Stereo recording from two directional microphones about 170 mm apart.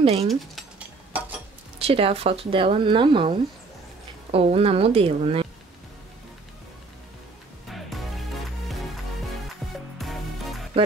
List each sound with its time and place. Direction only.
0.0 s speech: 35° right (ahead or behind)
0.3 s dishes: 5° right (ahead or behind)
1.8 s speech: 35° right (ahead or behind)
7.6 s music: centre (ahead or behind)
9.9 s music: centre (ahead or behind)